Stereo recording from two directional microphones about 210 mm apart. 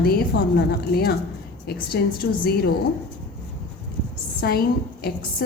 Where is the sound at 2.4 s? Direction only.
45° left (ahead or behind).